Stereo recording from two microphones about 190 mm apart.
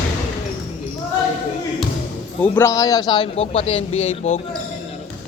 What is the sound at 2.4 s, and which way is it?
A man's voice, 10° left (ahead or behind).